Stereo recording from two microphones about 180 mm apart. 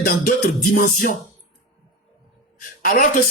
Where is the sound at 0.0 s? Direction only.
55° left (ahead or behind).